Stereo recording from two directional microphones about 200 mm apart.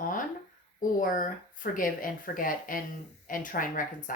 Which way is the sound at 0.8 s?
40° left (ahead or behind).